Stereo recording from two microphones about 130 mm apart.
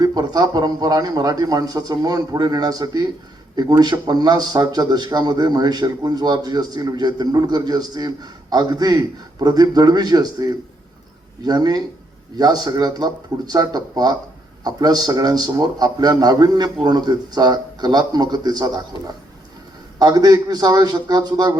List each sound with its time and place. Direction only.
0.0 s a man's voice: 30° right (ahead or behind)